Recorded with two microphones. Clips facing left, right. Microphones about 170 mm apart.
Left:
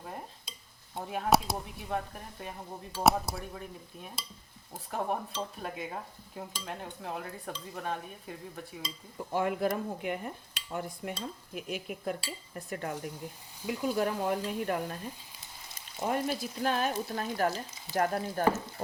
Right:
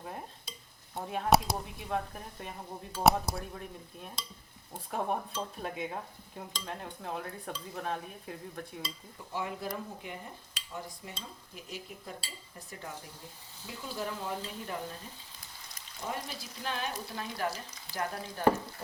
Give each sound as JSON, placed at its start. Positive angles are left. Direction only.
{"t": 1.0, "sound": "speech", "side_deg": 0}
{"t": 9.3, "sound": "speech", "side_deg": 55}
{"t": 16.0, "sound": "speech", "side_deg": 55}